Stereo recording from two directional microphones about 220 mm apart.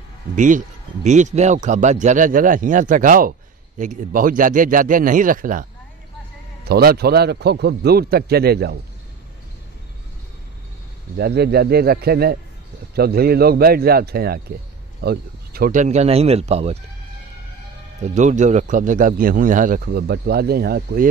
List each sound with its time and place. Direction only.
0.4 s a man's voice: 35° right (ahead or behind)
11.1 s a man's voice: 45° right (ahead or behind); by 16.8 s 30° right (ahead or behind)
18.0 s speech: 35° right (ahead or behind)